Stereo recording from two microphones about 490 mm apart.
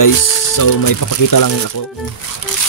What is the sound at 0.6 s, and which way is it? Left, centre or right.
Speech, left.